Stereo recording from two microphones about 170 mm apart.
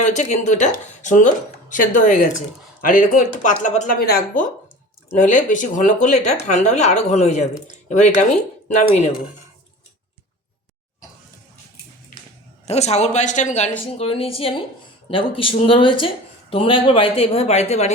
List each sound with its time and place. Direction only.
0.0 s speech: 45° left (ahead or behind)
3.9 s speech: 60° left (ahead or behind)
5.1 s speech: 45° left (ahead or behind)
12.6 s speech: 40° left (ahead or behind)